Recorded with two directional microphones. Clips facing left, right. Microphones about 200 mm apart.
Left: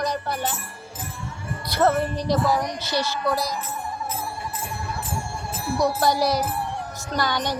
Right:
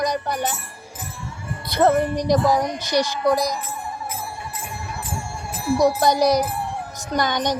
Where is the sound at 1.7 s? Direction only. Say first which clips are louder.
Right 3 dB; 15° right (ahead or behind).